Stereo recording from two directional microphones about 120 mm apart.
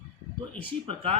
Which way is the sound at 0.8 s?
55° right (ahead or behind).